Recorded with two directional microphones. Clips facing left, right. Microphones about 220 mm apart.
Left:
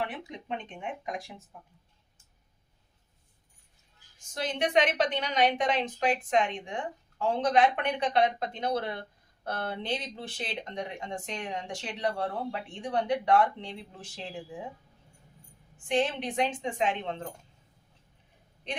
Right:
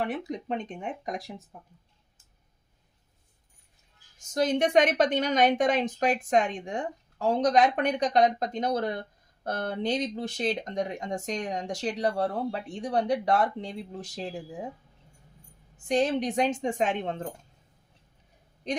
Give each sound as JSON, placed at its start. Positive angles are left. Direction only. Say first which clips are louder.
{"t": 0.0, "sound": "a woman's voice", "louder": "right 5 dB", "side_deg": -45}
{"t": 4.2, "sound": "a woman's voice", "louder": "right 6 dB", "side_deg": -45}
{"t": 15.8, "sound": "a woman's voice", "louder": "right 3 dB", "side_deg": -40}
{"t": 18.7, "sound": "a woman's voice", "louder": "right 6 dB", "side_deg": -40}